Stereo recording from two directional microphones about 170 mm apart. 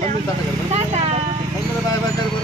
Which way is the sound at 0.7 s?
40° right (ahead or behind).